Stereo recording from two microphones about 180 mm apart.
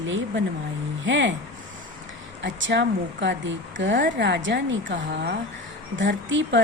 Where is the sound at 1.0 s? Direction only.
90° right.